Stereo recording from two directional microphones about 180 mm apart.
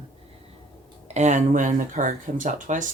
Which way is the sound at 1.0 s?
40° right (ahead or behind).